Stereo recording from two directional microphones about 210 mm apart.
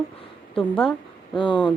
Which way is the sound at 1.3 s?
20° left (ahead or behind).